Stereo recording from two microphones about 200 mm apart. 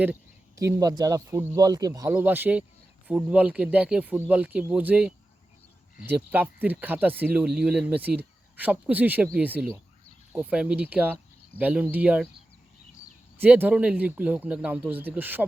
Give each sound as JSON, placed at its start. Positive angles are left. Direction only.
{"t": 0.0, "sound": "speech", "side_deg": -10}
{"t": 13.4, "sound": "speech", "side_deg": -10}